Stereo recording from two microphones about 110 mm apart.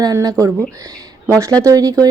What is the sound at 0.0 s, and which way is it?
Speech, 35° right (ahead or behind).